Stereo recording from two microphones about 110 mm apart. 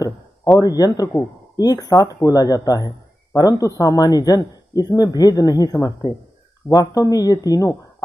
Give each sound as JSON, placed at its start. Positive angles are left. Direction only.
{"t": 0.6, "sound": "speech", "side_deg": 35}